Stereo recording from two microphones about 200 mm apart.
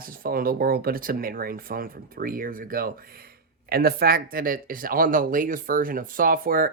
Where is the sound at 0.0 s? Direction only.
45° right (ahead or behind).